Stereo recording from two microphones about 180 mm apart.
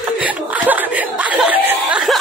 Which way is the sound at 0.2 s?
10° right (ahead or behind).